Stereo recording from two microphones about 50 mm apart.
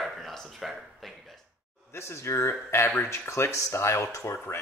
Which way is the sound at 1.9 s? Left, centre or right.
Left.